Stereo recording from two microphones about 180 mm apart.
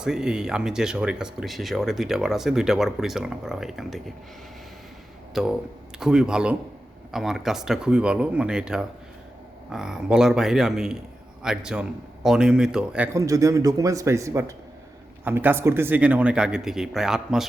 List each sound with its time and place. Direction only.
0.0 s speech: 5° right (ahead or behind)
5.3 s speech: centre (ahead or behind)
13.1 s speech: 20° right (ahead or behind); by 17.4 s centre (ahead or behind)